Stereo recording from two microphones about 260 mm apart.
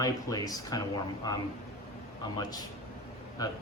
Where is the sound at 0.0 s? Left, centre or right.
Centre.